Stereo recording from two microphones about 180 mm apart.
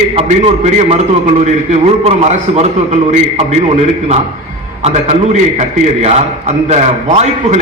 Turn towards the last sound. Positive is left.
turn(degrees=-40)  # may be behind; listen again after turning